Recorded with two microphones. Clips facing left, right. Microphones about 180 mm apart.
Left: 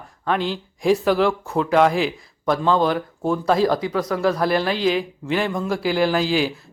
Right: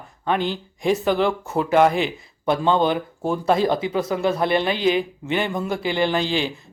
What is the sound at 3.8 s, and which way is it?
Speech, 25° right (ahead or behind).